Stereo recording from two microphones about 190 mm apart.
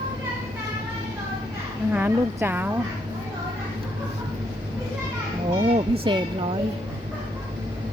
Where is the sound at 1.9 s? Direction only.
10° right (ahead or behind).